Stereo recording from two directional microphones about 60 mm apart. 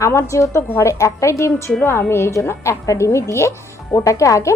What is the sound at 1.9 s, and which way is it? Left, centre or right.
A woman's voice, left.